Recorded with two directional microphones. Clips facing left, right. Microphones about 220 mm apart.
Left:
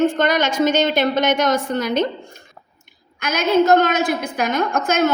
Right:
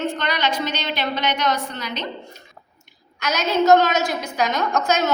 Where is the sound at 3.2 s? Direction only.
50° left (ahead or behind).